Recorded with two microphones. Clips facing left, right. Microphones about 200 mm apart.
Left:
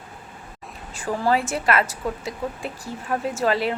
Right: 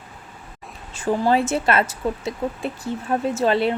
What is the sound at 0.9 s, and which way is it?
Speech, 25° right (ahead or behind).